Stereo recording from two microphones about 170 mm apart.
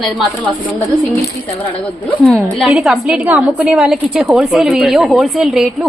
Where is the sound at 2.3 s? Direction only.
Centre (ahead or behind).